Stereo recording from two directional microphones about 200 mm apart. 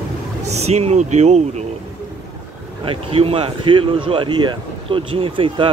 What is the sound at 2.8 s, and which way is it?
Speech, 25° right (ahead or behind).